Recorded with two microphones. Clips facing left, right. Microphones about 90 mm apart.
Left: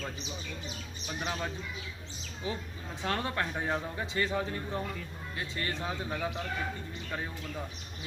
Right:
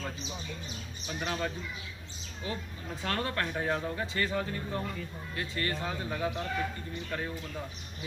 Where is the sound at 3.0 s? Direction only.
20° left (ahead or behind).